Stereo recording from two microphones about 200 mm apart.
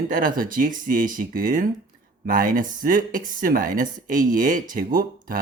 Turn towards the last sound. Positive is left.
turn(degrees=-45)  # may be behind; listen again after turning